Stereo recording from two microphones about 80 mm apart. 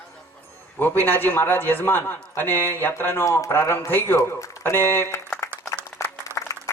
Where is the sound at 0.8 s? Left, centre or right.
Left.